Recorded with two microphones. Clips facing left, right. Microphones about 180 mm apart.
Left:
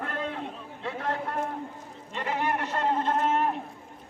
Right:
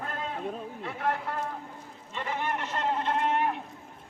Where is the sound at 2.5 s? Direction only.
50° left (ahead or behind).